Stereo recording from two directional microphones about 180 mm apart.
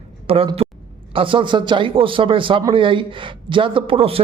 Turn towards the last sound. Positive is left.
turn(degrees=-30)  # may be behind; listen again after turning